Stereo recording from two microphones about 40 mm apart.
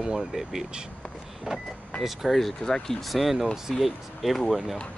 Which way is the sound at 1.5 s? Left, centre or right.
Centre.